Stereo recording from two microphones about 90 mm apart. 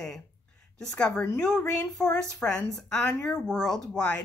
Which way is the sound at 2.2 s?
5° left (ahead or behind).